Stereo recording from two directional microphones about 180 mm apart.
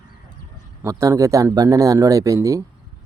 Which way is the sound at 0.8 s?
15° right (ahead or behind).